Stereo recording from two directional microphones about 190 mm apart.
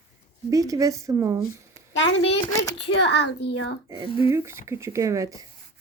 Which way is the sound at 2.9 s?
65° left (ahead or behind).